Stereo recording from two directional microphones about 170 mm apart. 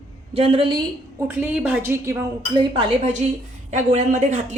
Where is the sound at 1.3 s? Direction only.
10° right (ahead or behind); by 3.1 s 30° right (ahead or behind).